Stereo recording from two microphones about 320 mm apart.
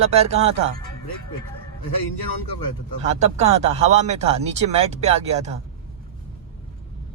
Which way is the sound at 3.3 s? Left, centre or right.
Centre.